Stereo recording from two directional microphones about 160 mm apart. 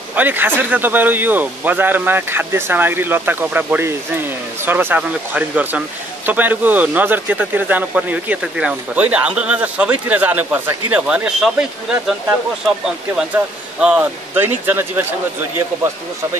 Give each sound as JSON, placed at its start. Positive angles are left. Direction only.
{"t": 0.1, "sound": "speech", "side_deg": -10}